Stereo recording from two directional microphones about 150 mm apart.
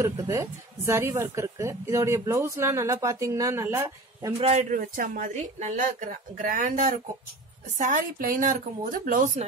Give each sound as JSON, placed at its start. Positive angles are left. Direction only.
{"t": 0.0, "sound": "a woman's voice", "side_deg": -20}
{"t": 4.4, "sound": "speech", "side_deg": -45}